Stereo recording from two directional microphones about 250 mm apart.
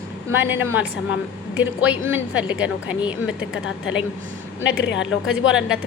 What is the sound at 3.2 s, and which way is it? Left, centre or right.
Speech, left.